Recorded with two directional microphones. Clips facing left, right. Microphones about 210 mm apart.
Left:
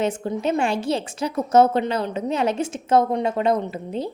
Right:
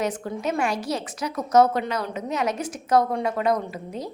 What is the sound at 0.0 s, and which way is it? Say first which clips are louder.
A woman's voice: left 4 dB; 25° left (ahead or behind).